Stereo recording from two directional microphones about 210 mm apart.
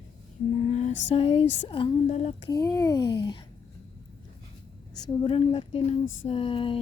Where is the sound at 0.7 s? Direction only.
30° left (ahead or behind).